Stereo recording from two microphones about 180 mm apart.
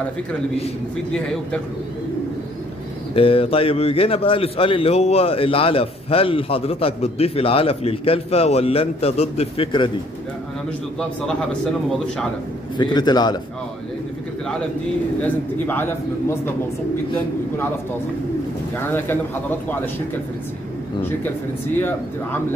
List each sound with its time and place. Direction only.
3.2 s a man's voice: 30° left (ahead or behind)
12.7 s a man's voice: 25° left (ahead or behind)
15.2 s a man's voice: 10° left (ahead or behind)
18.8 s a man's voice: 10° left (ahead or behind)